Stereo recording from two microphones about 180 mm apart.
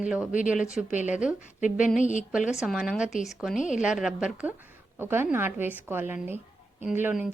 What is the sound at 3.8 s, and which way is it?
Speech, 5° right (ahead or behind).